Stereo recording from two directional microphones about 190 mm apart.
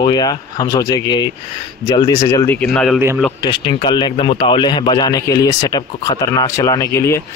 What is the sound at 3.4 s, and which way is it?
Speech, 25° left (ahead or behind).